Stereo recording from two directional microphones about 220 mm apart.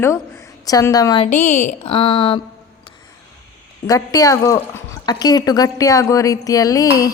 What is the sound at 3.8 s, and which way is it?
A woman's voice, 15° left (ahead or behind).